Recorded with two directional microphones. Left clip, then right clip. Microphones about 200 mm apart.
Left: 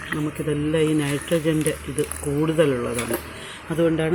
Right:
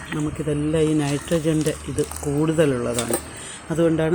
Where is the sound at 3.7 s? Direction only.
10° right (ahead or behind).